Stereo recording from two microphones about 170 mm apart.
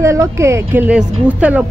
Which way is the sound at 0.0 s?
15° right (ahead or behind).